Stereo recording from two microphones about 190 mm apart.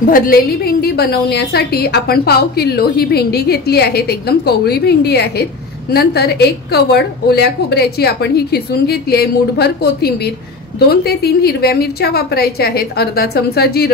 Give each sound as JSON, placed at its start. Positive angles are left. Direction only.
{"t": 0.1, "sound": "a woman's voice", "side_deg": 50}